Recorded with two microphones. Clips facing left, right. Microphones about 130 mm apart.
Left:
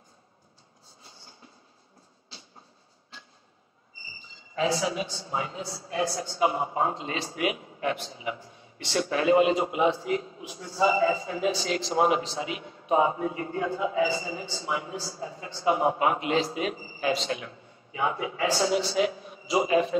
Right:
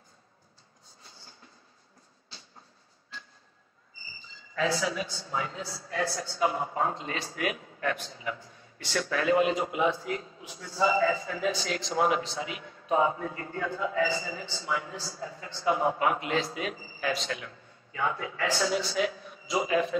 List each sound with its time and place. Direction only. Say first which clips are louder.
1.0 s train: left 2 dB; 20° left (ahead or behind)
4.6 s a man's voice: left 2 dB; 25° left (ahead or behind)